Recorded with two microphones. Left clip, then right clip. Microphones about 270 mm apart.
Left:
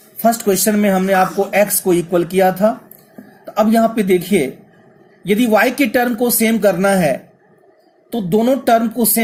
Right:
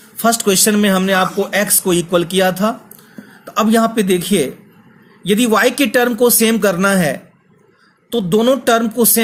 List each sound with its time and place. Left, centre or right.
0.2 s a man's voice: right